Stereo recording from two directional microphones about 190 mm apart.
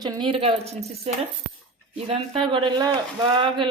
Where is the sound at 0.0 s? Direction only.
25° right (ahead or behind).